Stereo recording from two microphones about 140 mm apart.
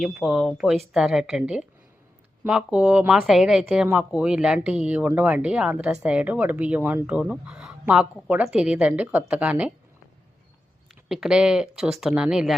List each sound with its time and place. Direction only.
0.0 s speech: centre (ahead or behind)
11.1 s speech: 5° right (ahead or behind)